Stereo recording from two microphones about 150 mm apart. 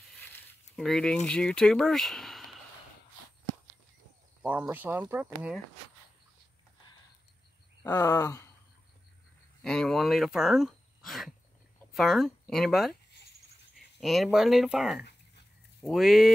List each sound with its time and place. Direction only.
0.2 s a sound: 15° left (ahead or behind)
0.7 s speech: 5° left (ahead or behind)
4.4 s speech: 10° right (ahead or behind)
7.9 s speech: 25° left (ahead or behind)
9.6 s speech: 5° left (ahead or behind)